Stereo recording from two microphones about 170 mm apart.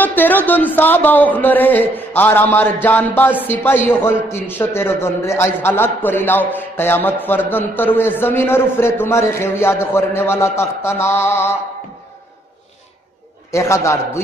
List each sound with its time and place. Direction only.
0.0 s a man's voice: 10° left (ahead or behind)
13.5 s a man's voice: 15° left (ahead or behind)